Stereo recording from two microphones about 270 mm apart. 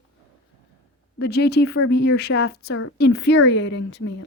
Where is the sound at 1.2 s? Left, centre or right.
Left.